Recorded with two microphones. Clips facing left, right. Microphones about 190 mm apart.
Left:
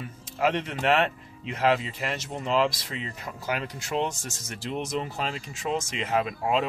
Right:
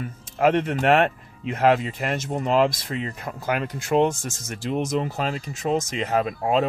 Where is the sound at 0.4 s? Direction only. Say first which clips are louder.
Right 6 dB; 50° right (ahead or behind).